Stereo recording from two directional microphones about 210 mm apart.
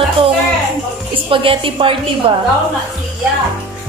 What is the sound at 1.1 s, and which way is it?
A woman's voice, 25° right (ahead or behind).